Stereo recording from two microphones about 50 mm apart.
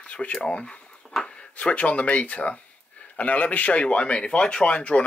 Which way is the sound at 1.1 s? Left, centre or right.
Centre.